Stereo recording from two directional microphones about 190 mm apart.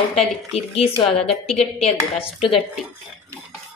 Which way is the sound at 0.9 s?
30° left (ahead or behind).